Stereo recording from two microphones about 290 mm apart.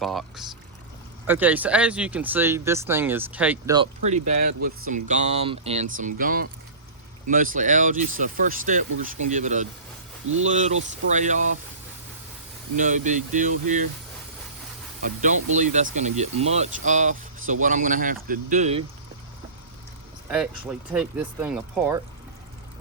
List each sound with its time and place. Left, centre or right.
0.0 s speech: centre
3.8 s speech: right
12.7 s speech: right
15.0 s speech: right
20.3 s speech: centre